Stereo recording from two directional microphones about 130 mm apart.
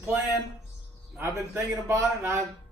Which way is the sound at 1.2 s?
20° right (ahead or behind).